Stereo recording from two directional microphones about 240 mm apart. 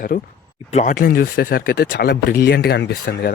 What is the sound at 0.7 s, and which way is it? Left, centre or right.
Speech, left.